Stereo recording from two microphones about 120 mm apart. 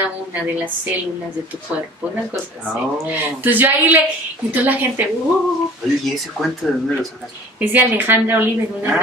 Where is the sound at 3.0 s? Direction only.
15° right (ahead or behind).